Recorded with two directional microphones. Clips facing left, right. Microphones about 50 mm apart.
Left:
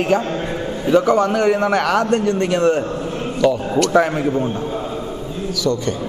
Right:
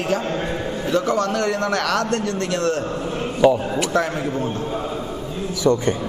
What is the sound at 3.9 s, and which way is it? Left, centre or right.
Speech, centre.